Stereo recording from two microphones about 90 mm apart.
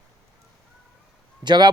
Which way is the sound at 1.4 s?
55° right (ahead or behind).